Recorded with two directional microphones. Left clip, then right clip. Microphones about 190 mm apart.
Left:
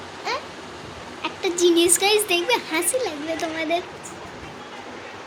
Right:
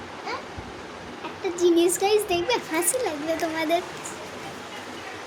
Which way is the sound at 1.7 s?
10° right (ahead or behind).